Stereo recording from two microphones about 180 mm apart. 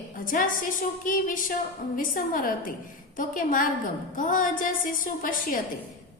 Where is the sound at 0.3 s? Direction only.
50° left (ahead or behind).